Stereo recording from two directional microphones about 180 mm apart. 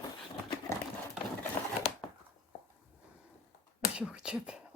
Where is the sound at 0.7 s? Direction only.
15° left (ahead or behind).